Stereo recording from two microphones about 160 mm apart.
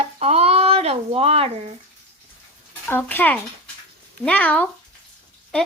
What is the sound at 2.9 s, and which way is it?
Speech, 10° left (ahead or behind).